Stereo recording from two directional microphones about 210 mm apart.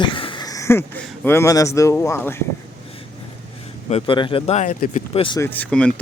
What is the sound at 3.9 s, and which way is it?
Speech, 25° left (ahead or behind).